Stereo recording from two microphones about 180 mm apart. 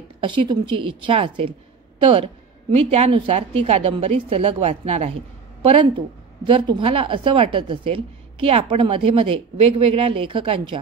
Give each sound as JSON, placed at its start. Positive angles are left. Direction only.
{"t": 0.2, "sound": "a woman's voice", "side_deg": -25}